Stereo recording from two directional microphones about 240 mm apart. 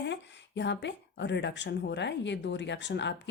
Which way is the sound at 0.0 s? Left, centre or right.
Left.